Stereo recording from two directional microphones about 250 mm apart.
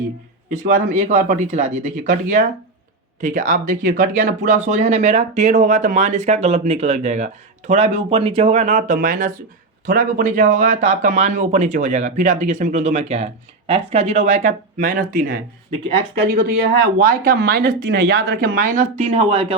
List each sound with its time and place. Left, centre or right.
0.5 s speech: right
17.0 s speech: right